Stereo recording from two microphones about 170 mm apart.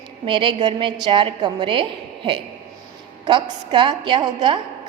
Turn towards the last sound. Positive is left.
turn(degrees=-25)  # may be behind; listen again after turning